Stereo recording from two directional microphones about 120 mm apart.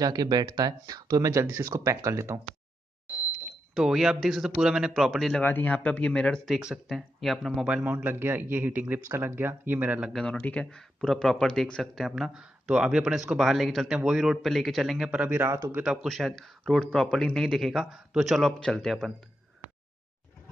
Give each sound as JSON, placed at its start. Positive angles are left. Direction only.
{"t": 0.0, "sound": "speech", "side_deg": -35}
{"t": 3.7, "sound": "speech", "side_deg": -5}
{"t": 5.3, "sound": "speech", "side_deg": 15}
{"t": 6.5, "sound": "speech", "side_deg": -5}
{"t": 10.2, "sound": "speech", "side_deg": 10}
{"t": 15.7, "sound": "speech", "side_deg": -5}